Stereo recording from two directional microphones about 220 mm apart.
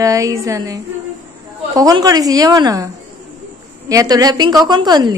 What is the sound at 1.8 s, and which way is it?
Speech, 15° right (ahead or behind).